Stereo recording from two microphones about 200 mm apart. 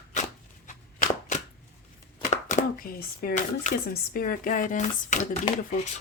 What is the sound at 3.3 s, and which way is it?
Speech, 40° left (ahead or behind).